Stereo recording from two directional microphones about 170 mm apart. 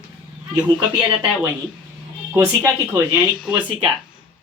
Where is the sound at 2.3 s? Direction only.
15° right (ahead or behind).